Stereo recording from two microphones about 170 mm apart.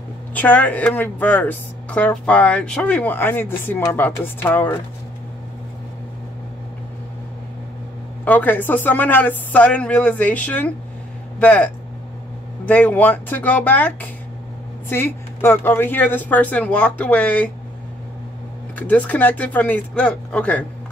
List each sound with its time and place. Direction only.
0.3 s speech: 10° left (ahead or behind)
8.3 s speech: 10° left (ahead or behind)
18.8 s speech: 10° left (ahead or behind)